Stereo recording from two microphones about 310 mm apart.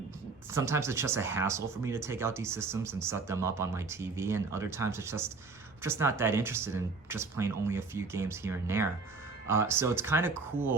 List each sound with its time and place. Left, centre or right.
0.5 s speech: centre